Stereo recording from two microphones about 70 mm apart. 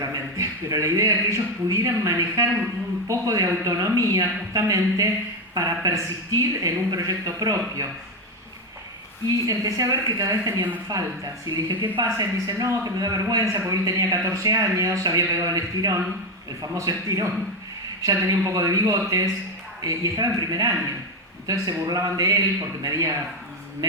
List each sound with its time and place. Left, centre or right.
0.0 s a man's voice: right
9.5 s speech: right
11.4 s a woman's voice: right
12.0 s speech: right